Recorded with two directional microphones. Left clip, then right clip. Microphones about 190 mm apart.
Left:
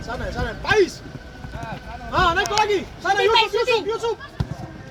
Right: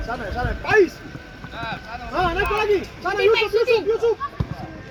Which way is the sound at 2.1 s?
20° right (ahead or behind).